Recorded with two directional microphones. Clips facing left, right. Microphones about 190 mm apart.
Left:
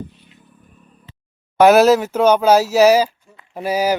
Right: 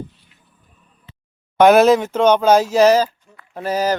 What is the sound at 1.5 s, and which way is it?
Speech, 5° left (ahead or behind).